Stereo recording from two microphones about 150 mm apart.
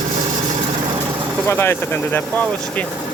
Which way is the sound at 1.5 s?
15° left (ahead or behind).